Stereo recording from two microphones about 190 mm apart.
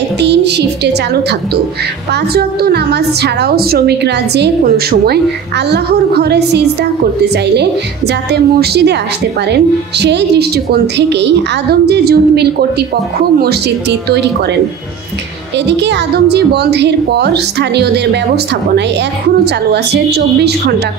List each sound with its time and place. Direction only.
0.2 s a sound: 65° right (ahead or behind)
2.3 s a woman's voice: 55° right (ahead or behind)
8.3 s a woman's voice: 60° right (ahead or behind)
15.7 s a woman's voice: 65° right (ahead or behind)